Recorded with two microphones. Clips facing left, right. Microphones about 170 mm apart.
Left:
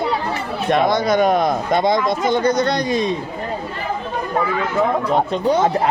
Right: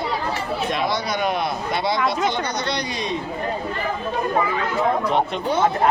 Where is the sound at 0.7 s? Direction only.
50° left (ahead or behind).